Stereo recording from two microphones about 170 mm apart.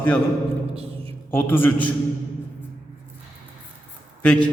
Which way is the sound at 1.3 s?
10° left (ahead or behind).